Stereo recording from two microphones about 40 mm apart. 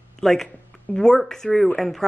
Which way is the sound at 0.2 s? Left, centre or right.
Centre.